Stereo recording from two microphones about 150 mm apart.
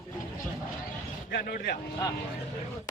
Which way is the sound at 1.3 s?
90° left.